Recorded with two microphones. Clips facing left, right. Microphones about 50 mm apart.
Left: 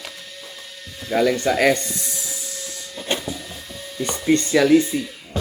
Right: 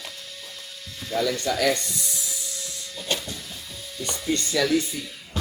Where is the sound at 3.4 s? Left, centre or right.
Left.